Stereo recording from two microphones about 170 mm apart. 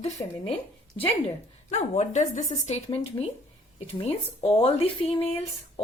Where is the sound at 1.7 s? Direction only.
45° left (ahead or behind).